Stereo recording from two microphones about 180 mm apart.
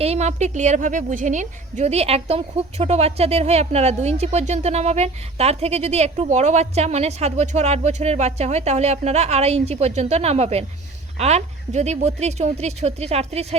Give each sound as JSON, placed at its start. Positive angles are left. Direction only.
{"t": 0.0, "sound": "a woman's voice", "side_deg": -35}